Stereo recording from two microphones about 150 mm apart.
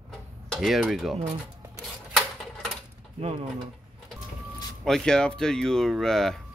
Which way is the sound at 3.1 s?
40° right (ahead or behind).